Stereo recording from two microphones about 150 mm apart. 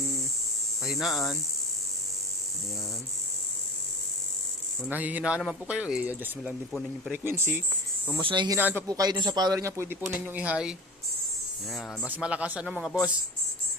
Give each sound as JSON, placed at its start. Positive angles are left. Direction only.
{"t": 0.9, "sound": "hum", "side_deg": 0}
{"t": 4.9, "sound": "speech", "side_deg": -10}
{"t": 8.2, "sound": "speech", "side_deg": -35}
{"t": 8.5, "sound": "speech", "side_deg": -15}
{"t": 8.9, "sound": "speech", "side_deg": -25}
{"t": 12.0, "sound": "speech", "side_deg": -10}